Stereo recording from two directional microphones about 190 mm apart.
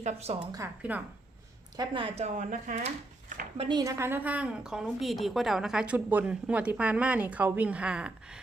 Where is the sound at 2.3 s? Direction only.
40° right (ahead or behind).